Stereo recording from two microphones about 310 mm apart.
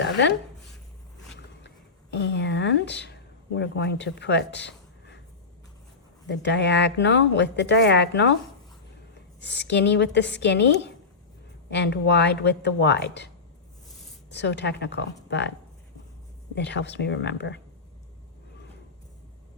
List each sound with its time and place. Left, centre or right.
0.0 s a sound: left
1.6 s speech: left
6.4 s speech: left
9.4 s speech: left
16.6 s speech: left